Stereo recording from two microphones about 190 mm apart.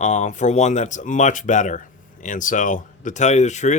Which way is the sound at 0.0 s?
40° left (ahead or behind).